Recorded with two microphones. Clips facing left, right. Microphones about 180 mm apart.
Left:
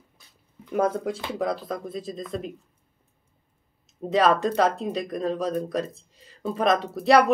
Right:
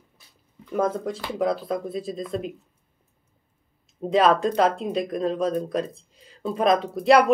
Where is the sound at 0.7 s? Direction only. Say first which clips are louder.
Even; 10° left (ahead or behind).